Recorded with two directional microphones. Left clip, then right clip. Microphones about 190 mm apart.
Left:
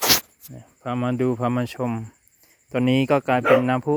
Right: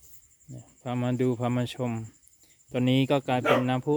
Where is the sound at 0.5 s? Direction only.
Centre (ahead or behind).